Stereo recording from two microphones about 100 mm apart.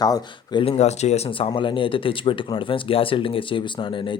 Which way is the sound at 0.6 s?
80° left.